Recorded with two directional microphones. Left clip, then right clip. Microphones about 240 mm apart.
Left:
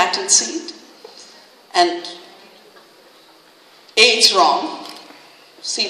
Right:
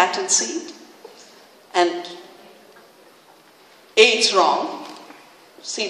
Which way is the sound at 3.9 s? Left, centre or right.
Left.